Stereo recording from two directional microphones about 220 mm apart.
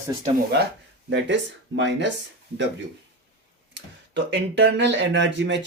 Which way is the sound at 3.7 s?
55° right (ahead or behind).